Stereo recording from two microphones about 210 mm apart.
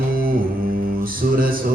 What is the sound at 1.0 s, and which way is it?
Music, 45° right (ahead or behind).